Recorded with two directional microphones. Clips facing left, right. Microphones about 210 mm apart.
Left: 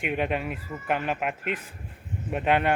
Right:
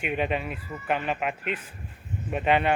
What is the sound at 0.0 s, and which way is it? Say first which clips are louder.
Speech: even; 10° left (ahead or behind).